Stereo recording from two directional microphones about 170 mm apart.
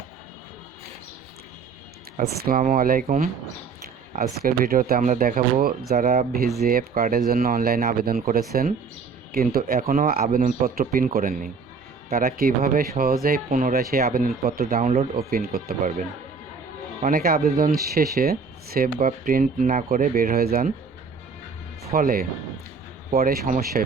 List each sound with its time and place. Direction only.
2.4 s speech: 55° right (ahead or behind)
15.3 s speech: 60° right (ahead or behind)
17.0 s speech: 55° right (ahead or behind)
21.8 s speech: 60° right (ahead or behind)